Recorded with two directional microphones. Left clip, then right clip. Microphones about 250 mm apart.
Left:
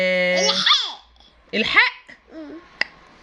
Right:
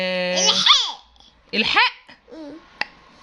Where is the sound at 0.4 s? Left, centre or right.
Right.